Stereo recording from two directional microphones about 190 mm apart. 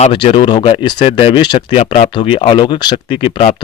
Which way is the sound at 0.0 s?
30° left (ahead or behind).